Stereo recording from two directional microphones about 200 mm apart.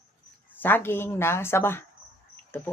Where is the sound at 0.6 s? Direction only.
10° left (ahead or behind).